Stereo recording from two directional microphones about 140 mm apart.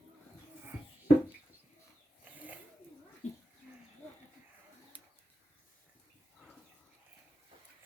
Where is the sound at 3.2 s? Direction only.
55° left (ahead or behind).